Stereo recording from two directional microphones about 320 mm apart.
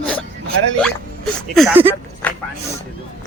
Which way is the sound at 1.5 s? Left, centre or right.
Centre.